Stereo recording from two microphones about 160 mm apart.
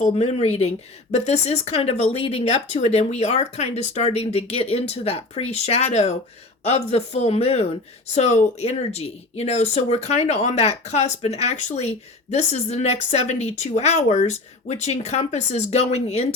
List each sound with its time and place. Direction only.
0.1 s speech: 40° left (ahead or behind)